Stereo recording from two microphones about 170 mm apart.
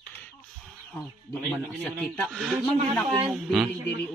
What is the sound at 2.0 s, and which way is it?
Speech, centre (ahead or behind).